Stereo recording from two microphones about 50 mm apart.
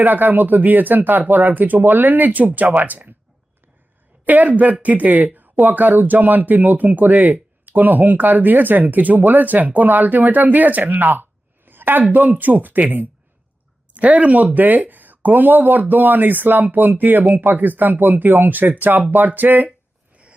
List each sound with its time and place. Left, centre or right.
0.0 s speech: right
4.3 s speech: right
13.9 s speech: right